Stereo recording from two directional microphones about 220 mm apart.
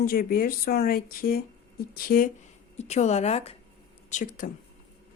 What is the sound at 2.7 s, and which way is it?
Speech, 30° left (ahead or behind).